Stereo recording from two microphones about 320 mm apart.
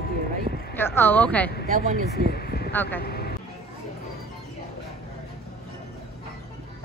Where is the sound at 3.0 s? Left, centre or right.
Left.